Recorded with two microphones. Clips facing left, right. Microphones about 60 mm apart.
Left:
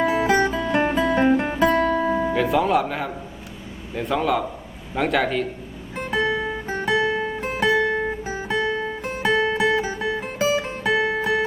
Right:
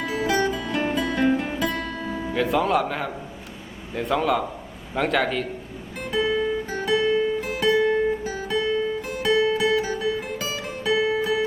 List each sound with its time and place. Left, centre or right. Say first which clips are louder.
0.0 s guitar: left 4 dB; left
1.4 s music: left 7 dB; left
2.3 s speech: right 1 dB; centre
6.3 s music: right 2 dB; left
6.7 s music: left 4 dB; left